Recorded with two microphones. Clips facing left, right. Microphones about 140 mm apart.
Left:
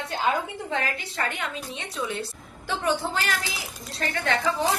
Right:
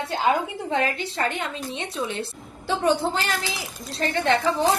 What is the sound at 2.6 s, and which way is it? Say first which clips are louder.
A woman's voice: right 5 dB; 25° right (ahead or behind).